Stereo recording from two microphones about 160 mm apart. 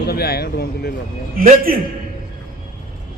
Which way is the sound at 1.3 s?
60° right (ahead or behind).